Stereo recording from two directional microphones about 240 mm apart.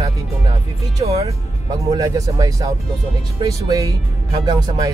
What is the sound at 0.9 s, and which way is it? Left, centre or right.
Music, right.